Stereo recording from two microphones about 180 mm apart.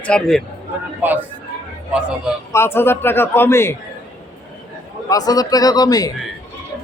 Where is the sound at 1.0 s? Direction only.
10° right (ahead or behind).